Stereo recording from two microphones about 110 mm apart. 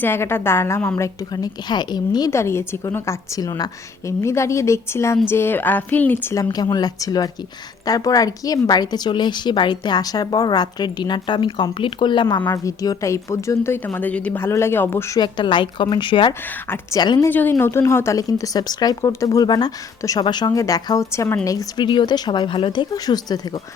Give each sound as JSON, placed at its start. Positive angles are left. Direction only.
{"t": 0.0, "sound": "a woman's voice", "side_deg": 20}
{"t": 0.9, "sound": "a woman's voice", "side_deg": 30}
{"t": 2.3, "sound": "a woman's voice", "side_deg": 25}
{"t": 6.3, "sound": "a woman's voice", "side_deg": 30}
{"t": 12.5, "sound": "a woman's voice", "side_deg": 35}
{"t": 15.2, "sound": "speech", "side_deg": 45}
{"t": 16.9, "sound": "a woman's voice", "side_deg": 35}
{"t": 17.2, "sound": "a woman's voice", "side_deg": 15}
{"t": 21.8, "sound": "speech", "side_deg": 45}